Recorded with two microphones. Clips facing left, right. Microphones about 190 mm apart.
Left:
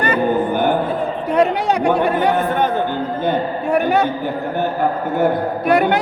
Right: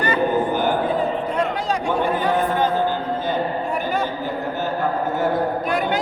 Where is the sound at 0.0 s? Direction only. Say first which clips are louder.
Left 3 dB; 55° left (ahead or behind).